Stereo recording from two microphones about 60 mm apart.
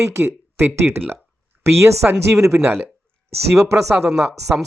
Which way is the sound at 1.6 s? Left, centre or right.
Right.